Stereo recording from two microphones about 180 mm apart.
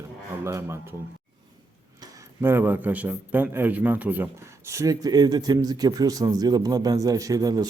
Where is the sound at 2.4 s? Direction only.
10° right (ahead or behind).